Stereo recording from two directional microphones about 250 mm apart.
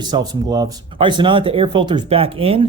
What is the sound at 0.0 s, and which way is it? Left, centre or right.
Speech, centre.